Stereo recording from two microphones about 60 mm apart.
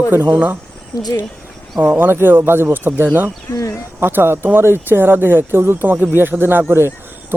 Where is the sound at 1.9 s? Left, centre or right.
Right.